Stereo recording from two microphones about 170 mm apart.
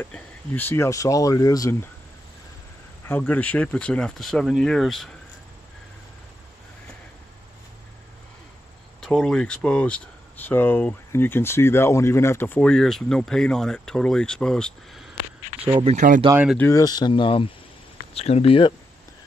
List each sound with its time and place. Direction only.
0.0 s speech: 10° left (ahead or behind)
3.1 s speech: 10° left (ahead or behind)
9.0 s speech: 5° left (ahead or behind)
15.6 s speech: 35° right (ahead or behind)
16.5 s speech: 15° left (ahead or behind); by 18.7 s 35° left (ahead or behind)